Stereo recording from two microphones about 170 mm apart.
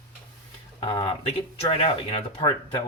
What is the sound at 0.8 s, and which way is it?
Speech, 30° left (ahead or behind).